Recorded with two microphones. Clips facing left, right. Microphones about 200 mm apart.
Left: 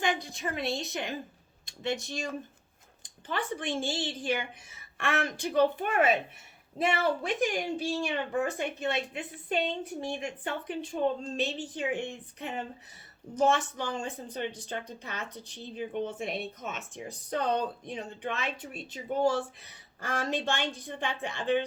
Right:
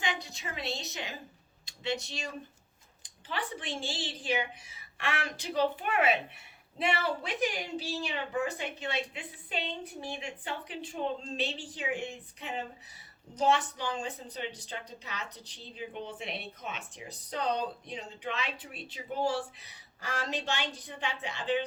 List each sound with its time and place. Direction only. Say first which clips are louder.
0.0 s a woman's voice: left 5 dB; 50° left (ahead or behind)
13.3 s a woman's voice: left 2 dB; 45° left (ahead or behind)